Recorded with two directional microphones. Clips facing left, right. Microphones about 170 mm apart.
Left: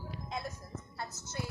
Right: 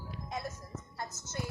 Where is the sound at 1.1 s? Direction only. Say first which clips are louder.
Right 1 dB; 10° left (ahead or behind).